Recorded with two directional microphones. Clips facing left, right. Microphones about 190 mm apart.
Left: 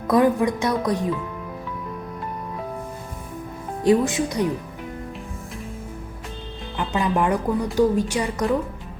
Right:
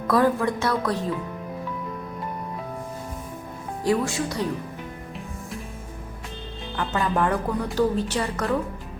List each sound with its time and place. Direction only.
0.1 s speech: 15° left (ahead or behind)
3.8 s speech: 20° left (ahead or behind)
7.0 s speech: 15° left (ahead or behind)